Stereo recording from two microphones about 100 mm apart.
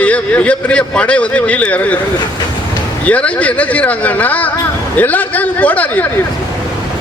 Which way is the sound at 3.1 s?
15° left (ahead or behind).